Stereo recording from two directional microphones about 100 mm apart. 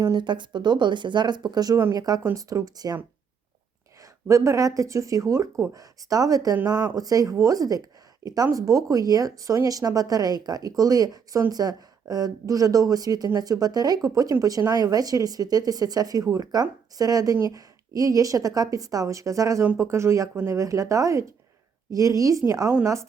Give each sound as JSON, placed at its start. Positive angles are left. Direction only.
{"t": 0.0, "sound": "speech", "side_deg": -45}
{"t": 4.0, "sound": "speech", "side_deg": -30}